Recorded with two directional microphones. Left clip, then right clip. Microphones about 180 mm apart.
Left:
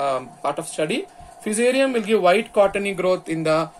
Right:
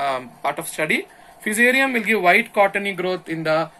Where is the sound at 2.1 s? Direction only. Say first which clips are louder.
Even; 60° left (ahead or behind).